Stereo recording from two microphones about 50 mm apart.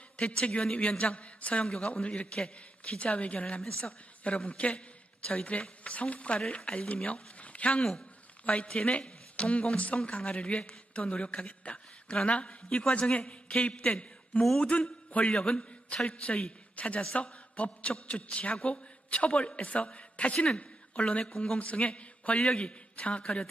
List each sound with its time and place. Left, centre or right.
0.2 s a man's voice: left
1.6 s speech: centre
1.9 s a man's voice: left
5.2 s speech: centre
5.8 s a man's voice: left
7.8 s speech: centre
8.4 s a man's voice: left
15.4 s a man's voice: centre
21.2 s speech: centre
21.6 s a man's voice: left